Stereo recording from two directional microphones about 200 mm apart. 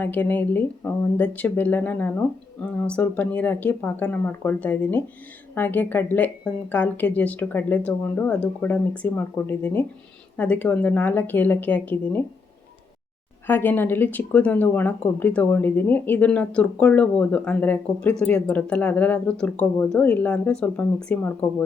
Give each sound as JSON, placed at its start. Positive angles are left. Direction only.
{"t": 0.0, "sound": "speech", "side_deg": 10}
{"t": 13.5, "sound": "speech", "side_deg": 10}